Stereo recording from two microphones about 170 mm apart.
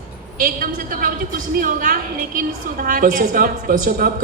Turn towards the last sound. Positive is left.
turn(degrees=-55)  # may be behind; listen again after turning